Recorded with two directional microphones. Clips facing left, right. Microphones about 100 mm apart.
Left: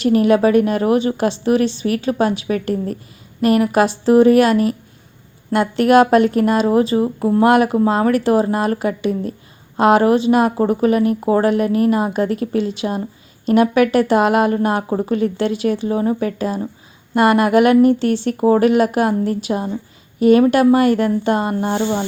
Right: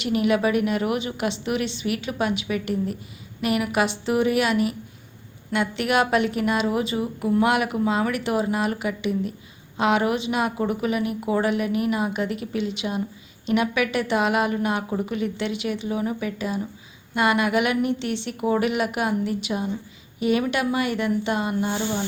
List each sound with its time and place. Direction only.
0.0 s a woman's voice: 40° left (ahead or behind)